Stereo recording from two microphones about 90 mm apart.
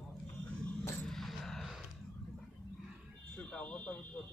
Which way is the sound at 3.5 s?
10° left (ahead or behind).